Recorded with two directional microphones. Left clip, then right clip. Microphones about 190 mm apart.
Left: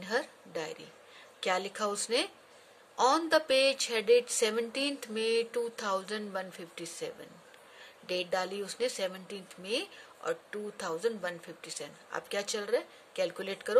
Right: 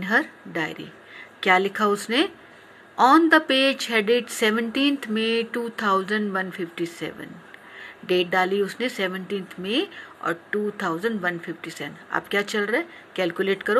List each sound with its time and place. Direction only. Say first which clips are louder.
0.0 s speech: right 11 dB; 25° left (ahead or behind)